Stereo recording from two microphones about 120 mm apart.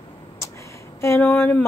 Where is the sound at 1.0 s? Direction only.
20° left (ahead or behind).